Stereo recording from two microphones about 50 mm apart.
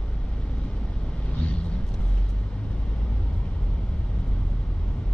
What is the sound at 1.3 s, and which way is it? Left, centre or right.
Vehicle, left.